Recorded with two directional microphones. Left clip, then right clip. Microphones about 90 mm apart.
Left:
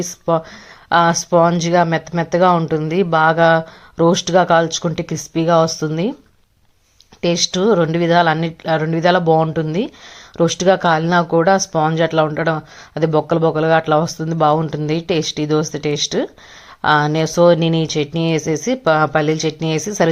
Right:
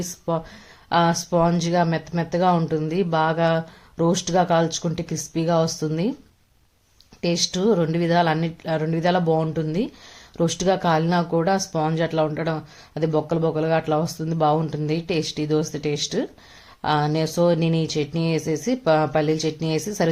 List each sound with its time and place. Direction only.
0.0 s speech: 25° left (ahead or behind)
7.2 s speech: 20° left (ahead or behind)